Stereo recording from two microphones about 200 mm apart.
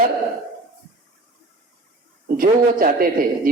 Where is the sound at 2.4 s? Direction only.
45° right (ahead or behind).